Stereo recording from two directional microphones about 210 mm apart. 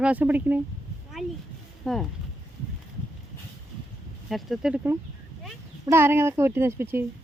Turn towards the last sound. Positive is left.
turn(degrees=-10)  # may be behind; listen again after turning